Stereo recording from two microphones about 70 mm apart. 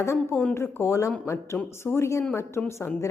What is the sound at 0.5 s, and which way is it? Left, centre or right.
A woman's voice, left.